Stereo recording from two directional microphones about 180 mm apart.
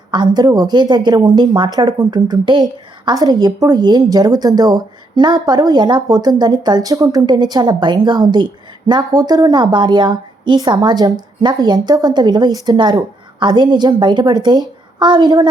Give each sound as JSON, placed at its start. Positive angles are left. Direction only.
{"t": 0.1, "sound": "a woman's voice", "side_deg": -25}